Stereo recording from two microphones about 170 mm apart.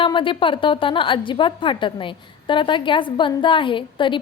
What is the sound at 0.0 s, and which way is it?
A woman's voice, 30° left (ahead or behind).